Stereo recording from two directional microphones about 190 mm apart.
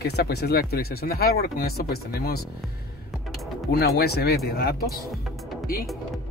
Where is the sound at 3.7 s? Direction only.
55° left (ahead or behind).